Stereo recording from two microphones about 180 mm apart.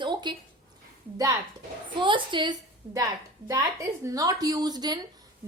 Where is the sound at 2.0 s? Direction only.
25° right (ahead or behind).